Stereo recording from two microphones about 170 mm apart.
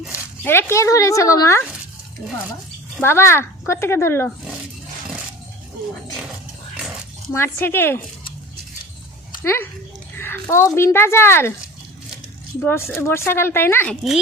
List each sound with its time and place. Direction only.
0.4 s speech: 15° left (ahead or behind)
3.0 s speech: 15° left (ahead or behind)
7.3 s speech: 15° left (ahead or behind)
9.4 s speech: 15° left (ahead or behind)
12.5 s speech: 15° left (ahead or behind)